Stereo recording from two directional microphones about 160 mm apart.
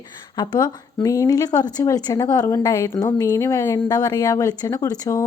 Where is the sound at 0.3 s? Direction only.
25° left (ahead or behind).